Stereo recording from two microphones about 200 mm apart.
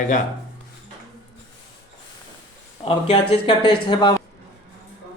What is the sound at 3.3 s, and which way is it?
Speech, 25° left (ahead or behind).